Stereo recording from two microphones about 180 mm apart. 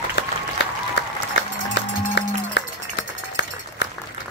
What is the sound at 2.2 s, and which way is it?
Run, 80° left.